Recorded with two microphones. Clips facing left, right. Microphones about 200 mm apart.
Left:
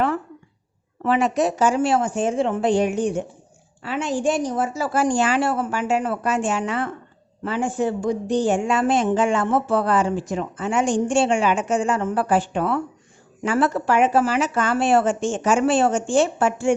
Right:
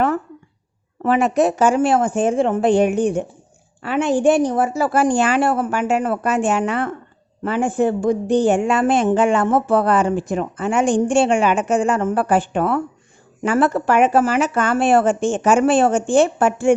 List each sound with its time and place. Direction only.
1.0 s a woman's voice: 50° right (ahead or behind)